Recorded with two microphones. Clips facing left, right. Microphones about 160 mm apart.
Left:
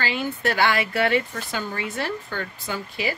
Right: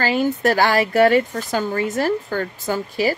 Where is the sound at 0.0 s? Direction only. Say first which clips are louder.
Right 7 dB; 45° right (ahead or behind).